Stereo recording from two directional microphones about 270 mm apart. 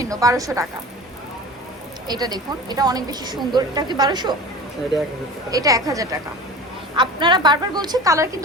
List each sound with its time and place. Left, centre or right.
0.0 s speech: centre
2.0 s speech: centre
5.5 s speech: centre